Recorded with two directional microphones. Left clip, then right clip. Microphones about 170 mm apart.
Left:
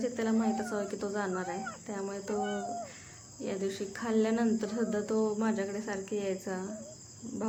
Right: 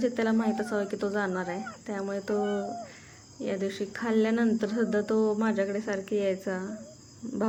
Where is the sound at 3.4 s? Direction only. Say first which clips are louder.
Right 4 dB; 20° right (ahead or behind).